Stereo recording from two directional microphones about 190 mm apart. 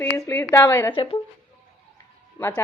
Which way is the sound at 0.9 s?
25° left (ahead or behind).